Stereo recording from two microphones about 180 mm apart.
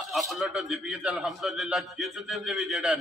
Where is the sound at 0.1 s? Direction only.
Centre (ahead or behind).